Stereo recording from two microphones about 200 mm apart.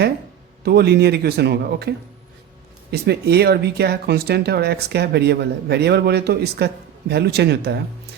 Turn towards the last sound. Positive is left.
turn(degrees=-55)  # may be behind; listen again after turning